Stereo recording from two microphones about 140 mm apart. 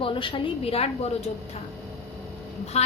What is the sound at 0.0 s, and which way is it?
Speech, 35° left (ahead or behind).